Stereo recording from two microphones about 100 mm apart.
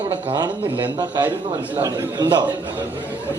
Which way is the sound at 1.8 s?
45° right (ahead or behind).